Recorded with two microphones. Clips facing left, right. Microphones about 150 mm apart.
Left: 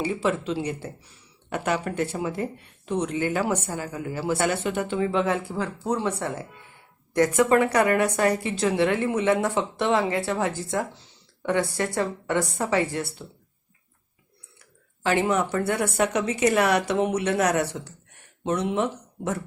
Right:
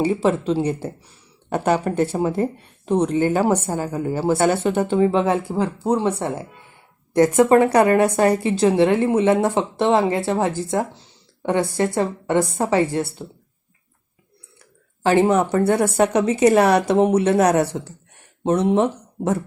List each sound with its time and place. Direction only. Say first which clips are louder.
0.0 s a woman's voice: right 6 dB; 35° right (ahead or behind)
15.0 s speech: right 7 dB; 35° right (ahead or behind)